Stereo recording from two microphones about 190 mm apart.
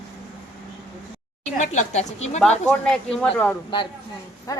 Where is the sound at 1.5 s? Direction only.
40° left (ahead or behind).